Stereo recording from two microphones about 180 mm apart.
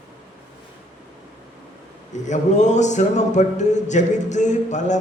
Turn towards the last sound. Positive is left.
turn(degrees=40)  # may be behind; listen again after turning